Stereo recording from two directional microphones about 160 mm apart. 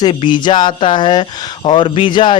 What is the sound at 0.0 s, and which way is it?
Speech, 30° left (ahead or behind).